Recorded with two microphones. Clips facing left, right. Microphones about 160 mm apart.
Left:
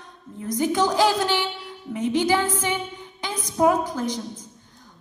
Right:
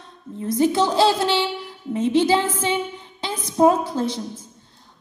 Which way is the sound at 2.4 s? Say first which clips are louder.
Right 1 dB; 15° left (ahead or behind).